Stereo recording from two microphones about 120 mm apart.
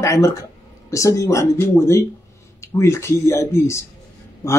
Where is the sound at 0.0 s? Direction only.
25° left (ahead or behind).